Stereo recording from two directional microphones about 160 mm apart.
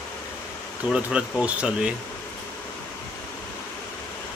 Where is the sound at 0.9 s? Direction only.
5° right (ahead or behind).